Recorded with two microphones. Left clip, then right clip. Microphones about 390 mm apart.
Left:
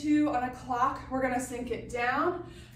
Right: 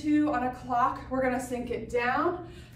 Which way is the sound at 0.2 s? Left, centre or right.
Centre.